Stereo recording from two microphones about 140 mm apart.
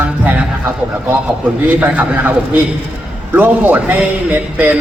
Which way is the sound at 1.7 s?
10° right (ahead or behind).